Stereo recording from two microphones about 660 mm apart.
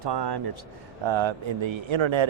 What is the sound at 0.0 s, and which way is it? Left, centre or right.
Speech, right.